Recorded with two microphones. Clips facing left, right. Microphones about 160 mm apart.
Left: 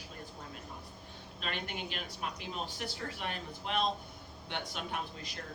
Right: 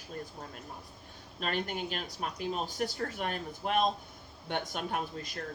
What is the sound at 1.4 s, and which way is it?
A woman's voice, 45° right (ahead or behind).